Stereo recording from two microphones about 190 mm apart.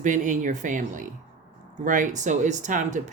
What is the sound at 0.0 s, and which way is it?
Speech, 40° right (ahead or behind).